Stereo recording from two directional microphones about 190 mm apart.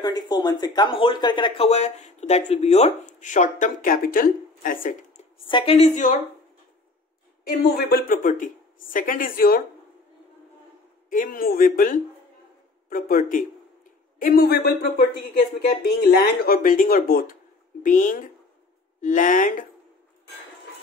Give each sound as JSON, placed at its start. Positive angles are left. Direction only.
{"t": 0.0, "sound": "speech", "side_deg": 20}
{"t": 5.5, "sound": "speech", "side_deg": 30}
{"t": 7.4, "sound": "speech", "side_deg": 50}
{"t": 11.1, "sound": "speech", "side_deg": 50}